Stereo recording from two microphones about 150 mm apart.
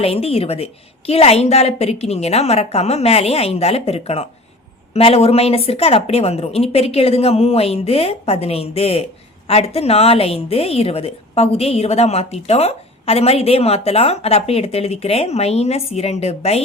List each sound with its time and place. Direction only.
0.0 s a woman's voice: 40° left (ahead or behind)